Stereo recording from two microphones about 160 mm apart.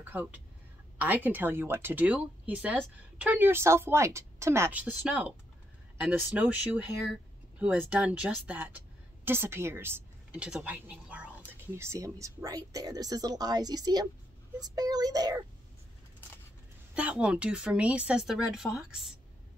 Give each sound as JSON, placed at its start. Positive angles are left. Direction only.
{"t": 0.0, "sound": "a woman's voice", "side_deg": -10}
{"t": 16.9, "sound": "a woman's voice", "side_deg": -10}